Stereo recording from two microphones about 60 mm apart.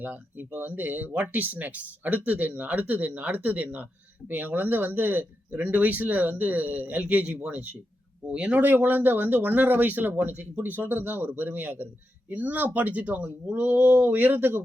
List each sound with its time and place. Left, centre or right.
0.0 s speech: right
8.6 s speech: right